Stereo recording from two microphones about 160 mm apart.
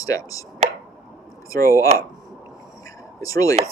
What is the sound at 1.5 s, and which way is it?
Speech, 20° left (ahead or behind).